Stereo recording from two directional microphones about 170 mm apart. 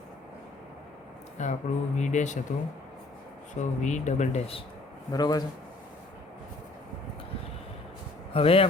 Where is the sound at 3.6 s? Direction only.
45° left (ahead or behind).